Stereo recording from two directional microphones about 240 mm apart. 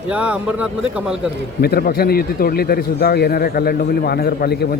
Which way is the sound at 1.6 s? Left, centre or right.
Left.